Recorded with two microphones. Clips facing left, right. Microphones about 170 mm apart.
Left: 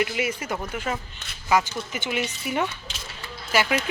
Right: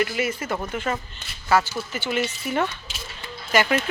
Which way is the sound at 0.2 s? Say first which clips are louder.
Right 2 dB; 15° left (ahead or behind).